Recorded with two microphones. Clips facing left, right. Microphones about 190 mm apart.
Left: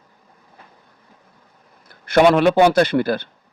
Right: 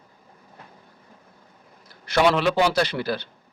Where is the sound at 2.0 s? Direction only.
50° left (ahead or behind).